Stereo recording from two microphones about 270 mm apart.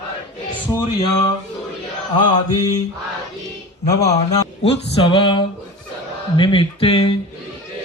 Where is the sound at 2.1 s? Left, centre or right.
Centre.